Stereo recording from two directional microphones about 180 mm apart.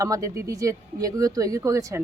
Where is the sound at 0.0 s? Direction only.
15° right (ahead or behind).